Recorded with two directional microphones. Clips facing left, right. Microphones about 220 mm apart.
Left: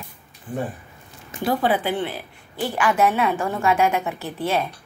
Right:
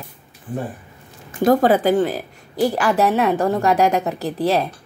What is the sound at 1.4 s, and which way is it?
A woman's voice, 45° right (ahead or behind).